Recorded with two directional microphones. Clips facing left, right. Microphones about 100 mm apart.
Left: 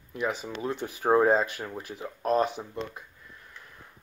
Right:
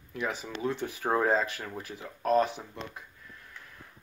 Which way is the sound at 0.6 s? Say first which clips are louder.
Even; 30° left (ahead or behind).